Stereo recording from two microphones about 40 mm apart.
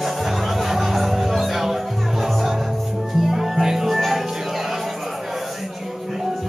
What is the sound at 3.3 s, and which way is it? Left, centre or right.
Music, centre.